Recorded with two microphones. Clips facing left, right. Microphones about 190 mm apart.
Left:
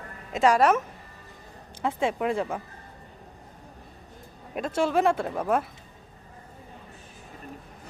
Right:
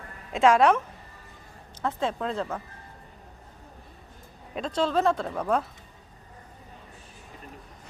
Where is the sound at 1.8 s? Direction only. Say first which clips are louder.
Left 3 dB; 10° left (ahead or behind).